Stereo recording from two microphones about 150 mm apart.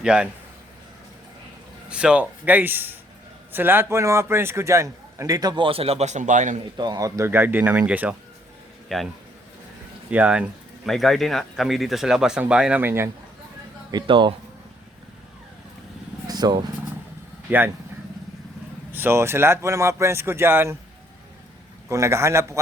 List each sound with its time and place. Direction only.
0.0 s speech: 5° right (ahead or behind)
1.9 s a man's voice: 5° right (ahead or behind); by 6.6 s 55° right (ahead or behind)
6.7 s speech: 25° right (ahead or behind); by 8.1 s 10° right (ahead or behind)
8.9 s speech: centre (ahead or behind)
10.1 s speech: 10° right (ahead or behind)
13.9 s speech: 35° right (ahead or behind)
16.2 s vehicle: 25° right (ahead or behind)
17.5 s speech: 10° right (ahead or behind)
18.9 s speech: 15° right (ahead or behind)
21.8 s a man's voice: 20° right (ahead or behind)